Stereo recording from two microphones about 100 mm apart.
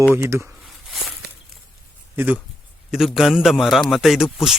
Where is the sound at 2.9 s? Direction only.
5° right (ahead or behind).